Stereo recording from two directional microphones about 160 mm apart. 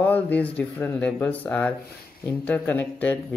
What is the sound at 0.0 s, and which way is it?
Speech, 10° left (ahead or behind).